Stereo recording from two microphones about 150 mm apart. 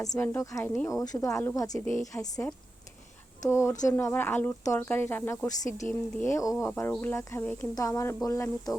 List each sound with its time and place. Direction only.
0.0 s a woman's voice: 20° left (ahead or behind)
0.9 s a woman's voice: 25° left (ahead or behind)